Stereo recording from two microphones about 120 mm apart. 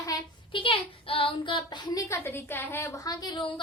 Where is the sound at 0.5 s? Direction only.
45° left (ahead or behind).